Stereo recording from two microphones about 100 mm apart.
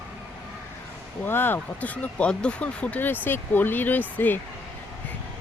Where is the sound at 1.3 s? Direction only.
20° left (ahead or behind).